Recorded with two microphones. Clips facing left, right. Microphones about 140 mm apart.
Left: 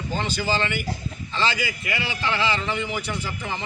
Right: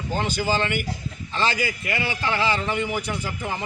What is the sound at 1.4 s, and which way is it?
Speech, 50° right (ahead or behind).